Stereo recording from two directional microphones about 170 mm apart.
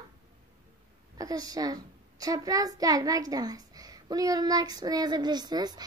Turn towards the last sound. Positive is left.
turn(degrees=-25)  # may be behind; listen again after turning